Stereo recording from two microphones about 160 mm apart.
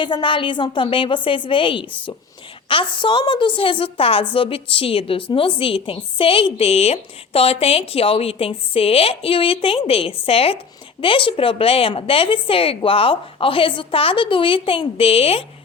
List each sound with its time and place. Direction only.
0.0 s a woman's voice: 30° left (ahead or behind)